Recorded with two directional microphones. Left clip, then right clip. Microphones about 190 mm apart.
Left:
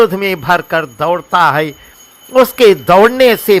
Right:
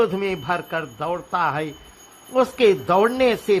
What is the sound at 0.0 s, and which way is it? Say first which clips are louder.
A man's voice: left 10 dB; 20° left (ahead or behind).